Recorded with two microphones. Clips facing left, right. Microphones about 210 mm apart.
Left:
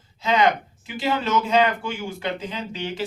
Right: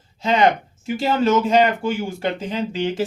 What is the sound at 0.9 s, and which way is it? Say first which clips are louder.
Speech: right 6 dB; 45° right (ahead or behind).